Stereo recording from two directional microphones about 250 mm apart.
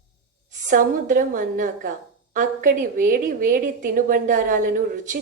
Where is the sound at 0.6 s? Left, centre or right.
Right.